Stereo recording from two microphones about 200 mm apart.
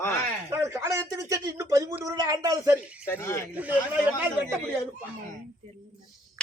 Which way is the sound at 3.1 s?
15° left (ahead or behind).